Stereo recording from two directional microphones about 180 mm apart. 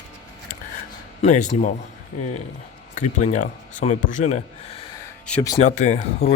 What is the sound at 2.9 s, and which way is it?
Speech, 40° left (ahead or behind).